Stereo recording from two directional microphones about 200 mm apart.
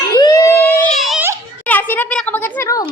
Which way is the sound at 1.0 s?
Centre (ahead or behind).